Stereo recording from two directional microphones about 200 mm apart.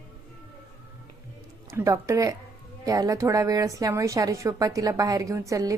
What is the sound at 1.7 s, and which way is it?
A woman's voice, 15° right (ahead or behind).